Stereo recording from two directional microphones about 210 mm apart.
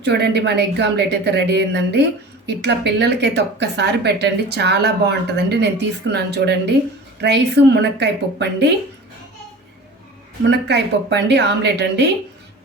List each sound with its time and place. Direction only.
0.0 s a woman's voice: 55° right (ahead or behind)
10.5 s a woman's voice: 55° right (ahead or behind)